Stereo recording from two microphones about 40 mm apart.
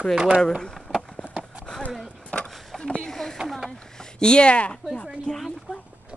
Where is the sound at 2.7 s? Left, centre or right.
Centre.